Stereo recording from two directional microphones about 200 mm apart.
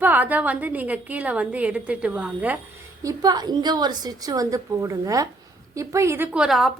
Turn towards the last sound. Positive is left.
turn(degrees=0)  # may be behind; listen again after turning